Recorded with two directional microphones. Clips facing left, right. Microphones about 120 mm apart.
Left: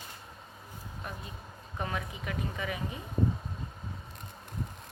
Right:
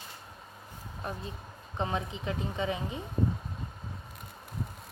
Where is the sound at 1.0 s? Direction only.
30° right (ahead or behind).